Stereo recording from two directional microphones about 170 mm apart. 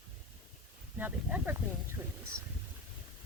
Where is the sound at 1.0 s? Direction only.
10° right (ahead or behind).